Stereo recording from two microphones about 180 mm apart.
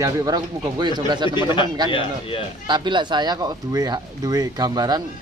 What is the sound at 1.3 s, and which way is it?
Speech, 25° left (ahead or behind).